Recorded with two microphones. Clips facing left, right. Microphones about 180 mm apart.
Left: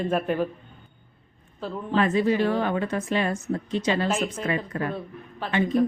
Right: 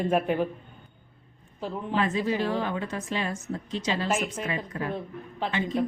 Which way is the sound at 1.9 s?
60° left (ahead or behind).